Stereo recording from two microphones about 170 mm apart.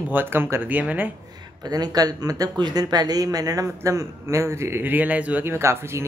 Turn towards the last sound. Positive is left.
turn(degrees=-15)  # may be behind; listen again after turning